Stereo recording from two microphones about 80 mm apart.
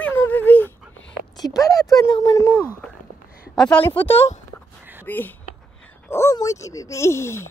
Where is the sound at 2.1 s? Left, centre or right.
Left.